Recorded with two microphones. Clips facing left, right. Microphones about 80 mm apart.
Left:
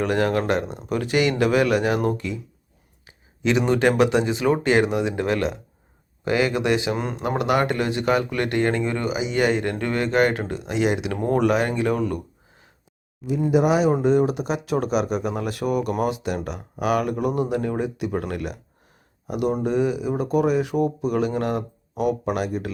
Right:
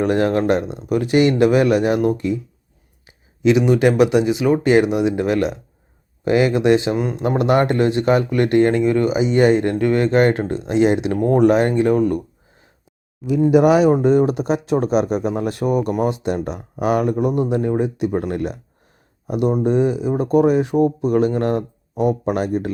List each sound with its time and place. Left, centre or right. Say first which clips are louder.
0.0 s speech: right 4 dB; right
3.1 s a sound: right 7 dB; centre
3.7 s speech: right 4 dB; centre
6.9 s speech: right 5 dB; centre
7.2 s speech: right 5 dB; right
9.1 s speech: right 5 dB; right
9.5 s speech: right 7 dB; right
13.5 s speech: right 6 dB; right
14.0 s speech: right 4 dB; right
14.6 s speech: right 4 dB; right